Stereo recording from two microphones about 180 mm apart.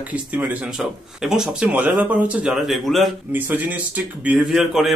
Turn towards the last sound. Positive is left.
turn(degrees=0)  # may be behind; listen again after turning